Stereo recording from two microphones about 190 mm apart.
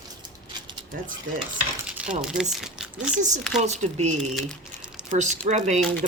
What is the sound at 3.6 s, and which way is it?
Speech, 35° right (ahead or behind).